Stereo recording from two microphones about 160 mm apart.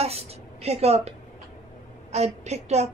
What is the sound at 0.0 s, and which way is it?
A woman's voice, 40° right (ahead or behind).